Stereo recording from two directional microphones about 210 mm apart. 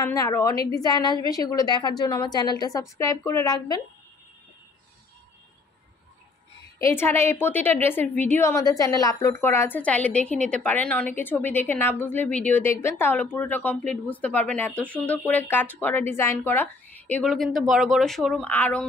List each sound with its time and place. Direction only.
0.0 s a woman's voice: 15° left (ahead or behind)
6.8 s a woman's voice: 10° left (ahead or behind)